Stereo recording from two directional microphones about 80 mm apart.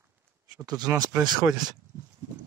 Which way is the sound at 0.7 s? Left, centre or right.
Right.